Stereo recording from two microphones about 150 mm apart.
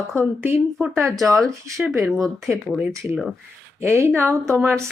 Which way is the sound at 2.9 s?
20° right (ahead or behind).